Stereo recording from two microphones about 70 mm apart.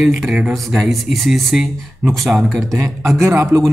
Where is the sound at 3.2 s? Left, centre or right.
Right.